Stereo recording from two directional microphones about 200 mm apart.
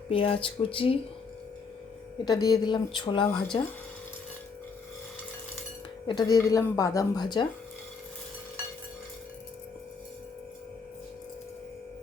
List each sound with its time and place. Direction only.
0.1 s speech: 25° left (ahead or behind)
2.2 s speech: 20° left (ahead or behind)
6.1 s speech: 20° left (ahead or behind)